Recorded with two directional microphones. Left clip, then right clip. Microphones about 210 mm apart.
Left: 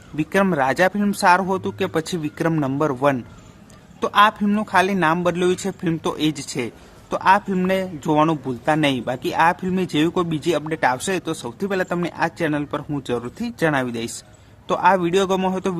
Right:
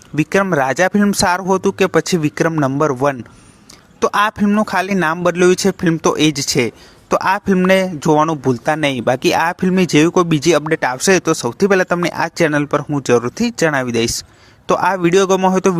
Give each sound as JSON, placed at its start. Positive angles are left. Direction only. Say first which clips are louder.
{"t": 0.2, "sound": "a man's voice", "louder": "right 4 dB", "side_deg": -30}